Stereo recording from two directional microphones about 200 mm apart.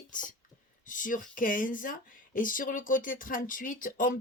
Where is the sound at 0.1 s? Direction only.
40° left (ahead or behind).